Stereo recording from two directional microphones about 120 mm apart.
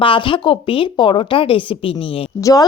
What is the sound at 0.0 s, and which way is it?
A woman's voice, 45° left (ahead or behind).